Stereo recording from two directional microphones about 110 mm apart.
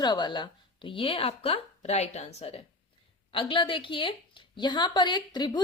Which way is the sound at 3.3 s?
50° left (ahead or behind).